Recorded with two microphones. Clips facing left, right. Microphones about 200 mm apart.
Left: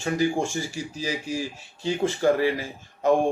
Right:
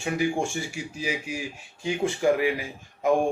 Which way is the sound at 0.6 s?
35° left (ahead or behind).